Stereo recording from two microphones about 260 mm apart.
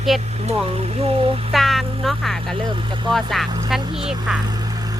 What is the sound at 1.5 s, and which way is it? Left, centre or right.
Vehicle, centre.